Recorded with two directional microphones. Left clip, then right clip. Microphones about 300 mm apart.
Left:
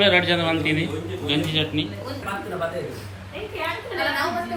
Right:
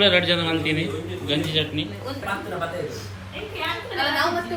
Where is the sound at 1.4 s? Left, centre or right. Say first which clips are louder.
Even; centre.